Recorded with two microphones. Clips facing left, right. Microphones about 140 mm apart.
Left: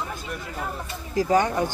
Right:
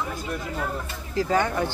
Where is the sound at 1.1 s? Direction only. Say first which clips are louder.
Left 2 dB; 15° left (ahead or behind).